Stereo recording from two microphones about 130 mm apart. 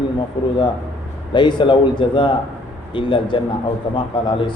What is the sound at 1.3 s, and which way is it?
Mantra, 35° left (ahead or behind).